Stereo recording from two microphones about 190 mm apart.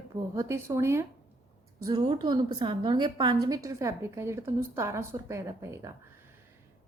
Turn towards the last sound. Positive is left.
turn(degrees=-15)  # may be behind; listen again after turning